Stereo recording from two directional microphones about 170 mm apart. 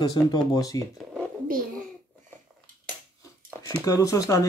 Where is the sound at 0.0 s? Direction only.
25° left (ahead or behind).